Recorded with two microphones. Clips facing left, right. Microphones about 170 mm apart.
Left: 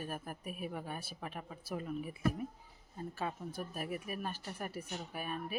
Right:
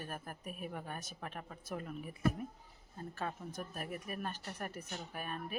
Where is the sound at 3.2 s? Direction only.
10° left (ahead or behind).